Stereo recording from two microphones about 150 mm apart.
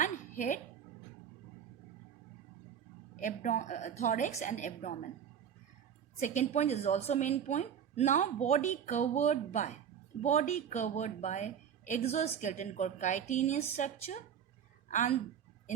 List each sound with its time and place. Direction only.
0.0 s a sound: 55° left (ahead or behind)
3.2 s a woman's voice: 55° left (ahead or behind)
6.1 s a woman's voice: 50° left (ahead or behind)